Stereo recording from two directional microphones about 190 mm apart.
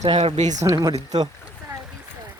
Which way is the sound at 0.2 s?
35° right (ahead or behind).